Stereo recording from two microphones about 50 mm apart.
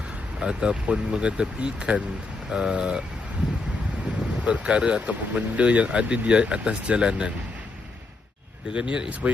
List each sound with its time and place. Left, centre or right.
0.3 s speech: centre
4.4 s speech: right
8.7 s speech: centre